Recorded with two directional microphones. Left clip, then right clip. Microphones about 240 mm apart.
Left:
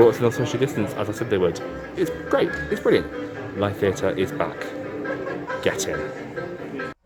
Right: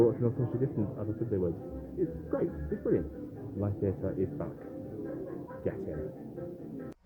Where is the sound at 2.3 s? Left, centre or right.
Centre.